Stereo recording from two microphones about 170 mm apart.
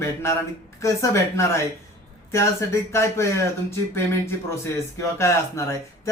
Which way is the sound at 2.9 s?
15° left (ahead or behind).